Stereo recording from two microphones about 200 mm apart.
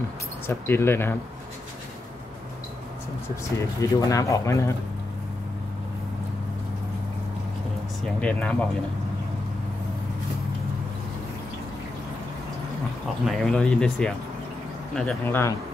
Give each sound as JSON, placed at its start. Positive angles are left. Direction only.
{"t": 0.5, "sound": "speech", "side_deg": 10}
{"t": 3.5, "sound": "speech", "side_deg": 15}
{"t": 8.2, "sound": "speech", "side_deg": 5}
{"t": 13.2, "sound": "speech", "side_deg": 0}